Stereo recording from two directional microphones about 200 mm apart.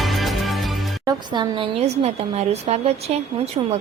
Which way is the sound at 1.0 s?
25° right (ahead or behind).